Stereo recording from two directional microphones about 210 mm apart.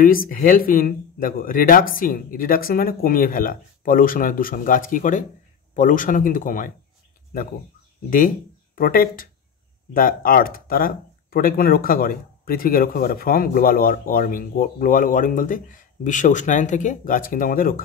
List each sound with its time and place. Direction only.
0.0 s speech: 45° left (ahead or behind)
8.7 s speech: 45° left (ahead or behind)